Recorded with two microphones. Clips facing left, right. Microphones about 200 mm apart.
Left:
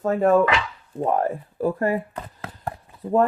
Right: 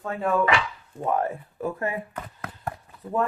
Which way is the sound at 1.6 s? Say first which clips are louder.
Left 7 dB; 35° left (ahead or behind).